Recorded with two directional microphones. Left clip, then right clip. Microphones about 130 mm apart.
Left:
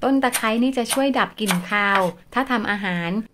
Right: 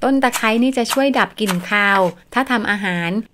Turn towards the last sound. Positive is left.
turn(degrees=-30)  # may be behind; listen again after turning